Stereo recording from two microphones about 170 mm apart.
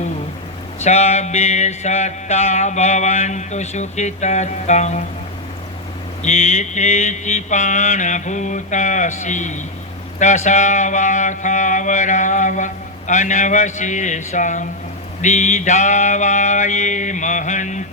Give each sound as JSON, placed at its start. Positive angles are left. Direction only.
{"t": 0.8, "sound": "mantra", "side_deg": 40}
{"t": 6.2, "sound": "mantra", "side_deg": 40}